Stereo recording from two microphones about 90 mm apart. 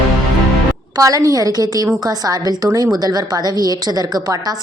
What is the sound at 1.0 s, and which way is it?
A woman's voice, 40° right (ahead or behind).